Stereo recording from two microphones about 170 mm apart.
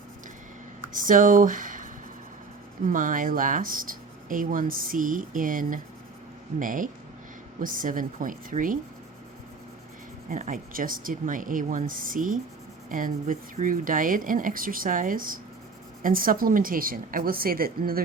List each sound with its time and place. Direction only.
0.9 s speech: 50° right (ahead or behind)
10.2 s a woman's voice: 50° right (ahead or behind)